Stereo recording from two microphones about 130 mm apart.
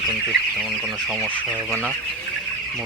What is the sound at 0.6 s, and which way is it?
Speech, 5° right (ahead or behind).